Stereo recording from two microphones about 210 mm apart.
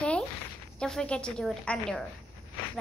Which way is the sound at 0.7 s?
5° left (ahead or behind).